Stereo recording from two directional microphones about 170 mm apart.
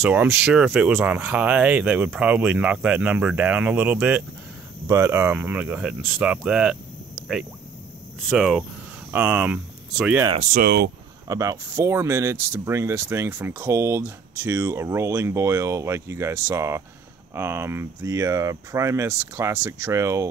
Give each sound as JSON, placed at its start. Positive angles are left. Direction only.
{"t": 0.0, "sound": "speech", "side_deg": -10}
{"t": 8.3, "sound": "speech", "side_deg": 0}
{"t": 10.5, "sound": "speech", "side_deg": -65}
{"t": 11.2, "sound": "speech", "side_deg": -20}